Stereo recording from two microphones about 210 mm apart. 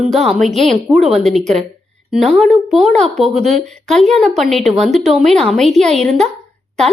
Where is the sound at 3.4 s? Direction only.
35° right (ahead or behind).